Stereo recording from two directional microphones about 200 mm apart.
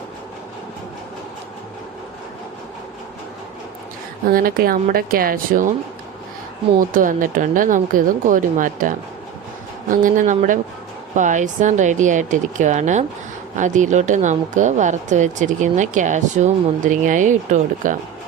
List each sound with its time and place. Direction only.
4.3 s speech: 45° right (ahead or behind)
6.7 s speech: 40° right (ahead or behind)
9.9 s speech: 40° right (ahead or behind)